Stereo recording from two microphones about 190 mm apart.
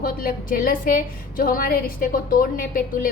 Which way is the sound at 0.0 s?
50° left (ahead or behind).